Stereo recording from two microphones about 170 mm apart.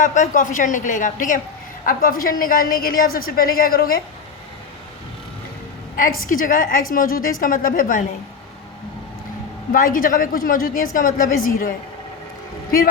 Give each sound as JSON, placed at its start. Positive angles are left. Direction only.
{"t": 0.0, "sound": "a woman's voice", "side_deg": 50}
{"t": 6.0, "sound": "a woman's voice", "side_deg": 55}
{"t": 9.7, "sound": "a woman's voice", "side_deg": 55}